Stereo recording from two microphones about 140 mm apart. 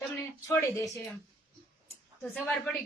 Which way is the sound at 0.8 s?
Centre (ahead or behind).